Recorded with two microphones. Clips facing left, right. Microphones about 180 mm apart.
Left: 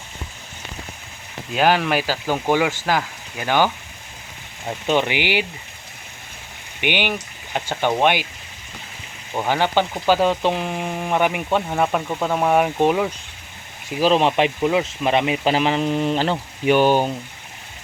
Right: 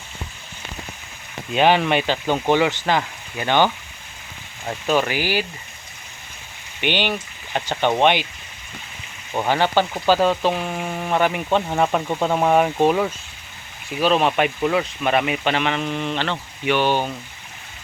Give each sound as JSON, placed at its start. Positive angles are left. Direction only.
{"t": 1.5, "sound": "speech", "side_deg": 0}
{"t": 4.9, "sound": "speech", "side_deg": 20}
{"t": 6.8, "sound": "speech", "side_deg": 15}
{"t": 9.5, "sound": "speech", "side_deg": 15}
{"t": 11.7, "sound": "speech", "side_deg": 0}
{"t": 14.0, "sound": "speech", "side_deg": 25}